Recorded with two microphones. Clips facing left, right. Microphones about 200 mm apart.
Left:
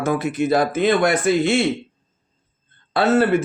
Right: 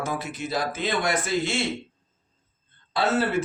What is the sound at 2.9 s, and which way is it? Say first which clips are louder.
Speech: left 7 dB; 55° left (ahead or behind).